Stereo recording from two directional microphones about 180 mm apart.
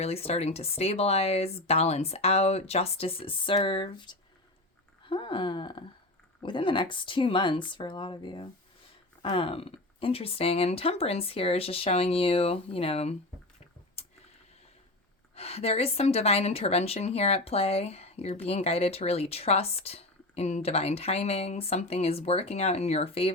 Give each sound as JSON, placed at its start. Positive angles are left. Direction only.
{"t": 0.0, "sound": "a woman's voice", "side_deg": 35}
{"t": 14.0, "sound": "a sound", "side_deg": 35}
{"t": 15.4, "sound": "a woman's voice", "side_deg": 35}